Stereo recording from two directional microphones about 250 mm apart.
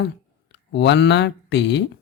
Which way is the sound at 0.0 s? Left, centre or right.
Left.